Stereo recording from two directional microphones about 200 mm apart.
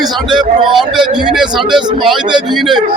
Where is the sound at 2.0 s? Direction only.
20° right (ahead or behind).